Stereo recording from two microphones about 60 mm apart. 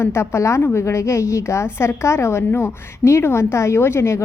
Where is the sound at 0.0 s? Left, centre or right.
Left.